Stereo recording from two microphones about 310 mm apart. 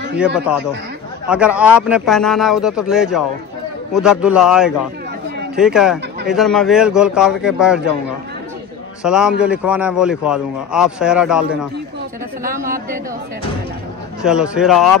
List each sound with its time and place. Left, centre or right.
0.2 s a man's voice: centre
9.0 s a man's voice: centre
12.4 s speech: right
14.2 s a man's voice: centre